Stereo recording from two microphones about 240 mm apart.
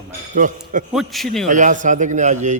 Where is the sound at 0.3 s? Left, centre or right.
Right.